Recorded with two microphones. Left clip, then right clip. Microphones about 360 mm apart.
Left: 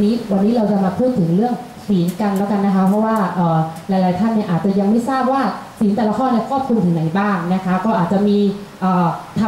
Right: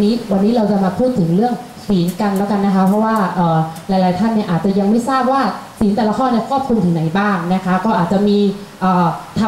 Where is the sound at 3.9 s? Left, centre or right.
Centre.